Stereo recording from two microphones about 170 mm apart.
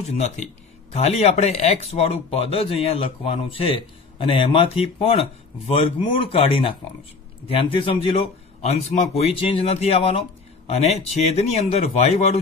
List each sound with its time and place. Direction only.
0.9 s speech: 40° left (ahead or behind)